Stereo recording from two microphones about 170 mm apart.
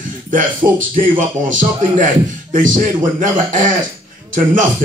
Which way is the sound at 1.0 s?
50° right (ahead or behind).